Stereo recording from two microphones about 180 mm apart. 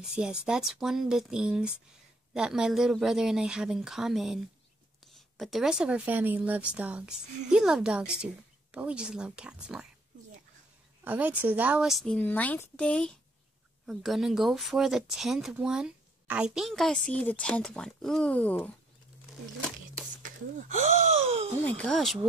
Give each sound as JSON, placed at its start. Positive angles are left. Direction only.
{"t": 0.1, "sound": "speech", "side_deg": -5}
{"t": 11.1, "sound": "speech", "side_deg": -10}
{"t": 20.2, "sound": "a sound", "side_deg": -45}
{"t": 21.6, "sound": "speech", "side_deg": 5}